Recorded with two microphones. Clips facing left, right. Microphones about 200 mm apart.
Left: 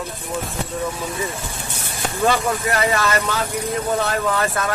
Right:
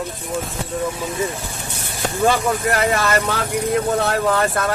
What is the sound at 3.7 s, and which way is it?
Speech, 55° right (ahead or behind).